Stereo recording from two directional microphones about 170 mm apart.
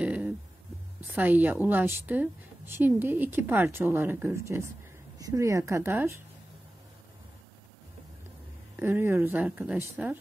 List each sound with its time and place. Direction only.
0.0 s a sound: 10° right (ahead or behind)
1.1 s a woman's voice: 10° right (ahead or behind)
8.7 s a woman's voice: 10° right (ahead or behind)